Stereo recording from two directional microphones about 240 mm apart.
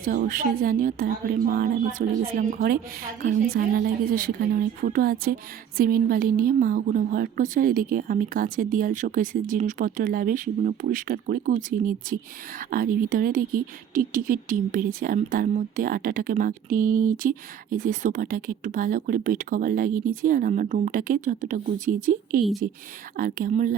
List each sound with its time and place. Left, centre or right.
0.0 s speech: right